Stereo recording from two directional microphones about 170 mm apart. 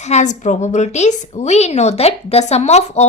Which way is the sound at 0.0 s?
45° left (ahead or behind).